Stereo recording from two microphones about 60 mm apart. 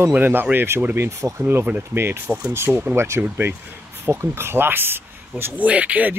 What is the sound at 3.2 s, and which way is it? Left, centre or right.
Speech, right.